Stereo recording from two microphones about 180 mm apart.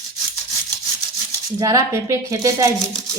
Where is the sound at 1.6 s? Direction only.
15° right (ahead or behind).